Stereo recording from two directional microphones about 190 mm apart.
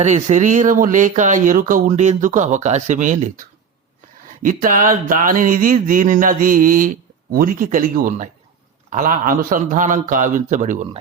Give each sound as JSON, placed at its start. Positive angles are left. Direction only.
{"t": 0.0, "sound": "speech", "side_deg": -40}
{"t": 4.4, "sound": "speech", "side_deg": -45}